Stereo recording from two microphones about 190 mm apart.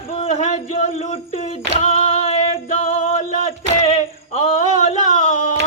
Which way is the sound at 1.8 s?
35° left (ahead or behind).